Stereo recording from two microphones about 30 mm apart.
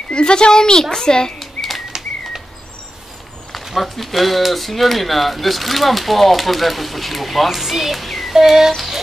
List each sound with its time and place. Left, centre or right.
0.1 s a child's voice: left
1.4 s bird flight: centre
3.7 s speech: centre
8.4 s speech: centre